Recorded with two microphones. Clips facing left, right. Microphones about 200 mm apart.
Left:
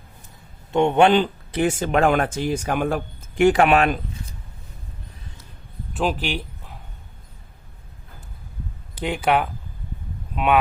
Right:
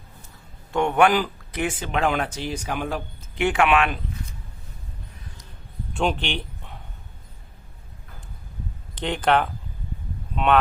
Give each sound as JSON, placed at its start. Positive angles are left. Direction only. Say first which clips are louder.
{"t": 0.7, "sound": "speech", "louder": "left 3 dB", "side_deg": 25}
{"t": 1.6, "sound": "speech", "louder": "left 5 dB", "side_deg": 45}
{"t": 5.9, "sound": "a sound", "louder": "left 1 dB", "side_deg": 0}
{"t": 9.0, "sound": "speech", "louder": "even", "side_deg": 10}